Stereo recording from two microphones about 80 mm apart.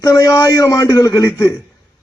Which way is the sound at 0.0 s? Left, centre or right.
Left.